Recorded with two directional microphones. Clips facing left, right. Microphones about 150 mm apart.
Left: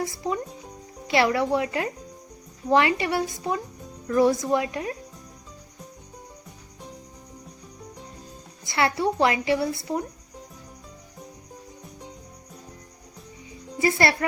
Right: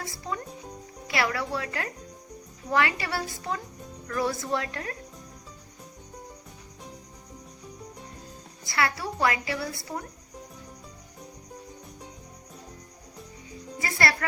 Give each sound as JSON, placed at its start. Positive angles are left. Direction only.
{"t": 0.0, "sound": "a woman's voice", "side_deg": 20}
{"t": 8.6, "sound": "a woman's voice", "side_deg": 25}
{"t": 13.7, "sound": "a woman's voice", "side_deg": 25}